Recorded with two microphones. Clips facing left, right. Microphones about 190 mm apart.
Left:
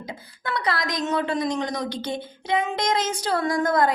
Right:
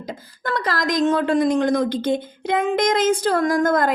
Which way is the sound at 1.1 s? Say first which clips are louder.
Right 3 dB; 50° right (ahead or behind).